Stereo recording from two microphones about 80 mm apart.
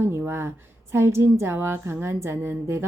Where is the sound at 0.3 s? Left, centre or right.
Right.